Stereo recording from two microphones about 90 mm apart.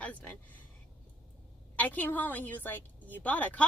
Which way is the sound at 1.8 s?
20° left (ahead or behind).